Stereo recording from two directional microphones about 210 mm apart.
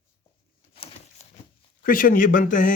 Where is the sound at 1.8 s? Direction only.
40° left (ahead or behind).